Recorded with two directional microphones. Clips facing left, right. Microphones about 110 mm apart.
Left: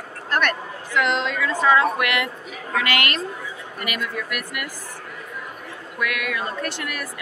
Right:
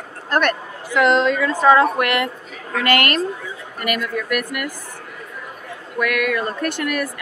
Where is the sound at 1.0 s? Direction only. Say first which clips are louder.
Right 6 dB; 45° right (ahead or behind).